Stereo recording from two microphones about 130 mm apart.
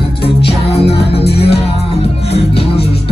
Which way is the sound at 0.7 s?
50° left (ahead or behind).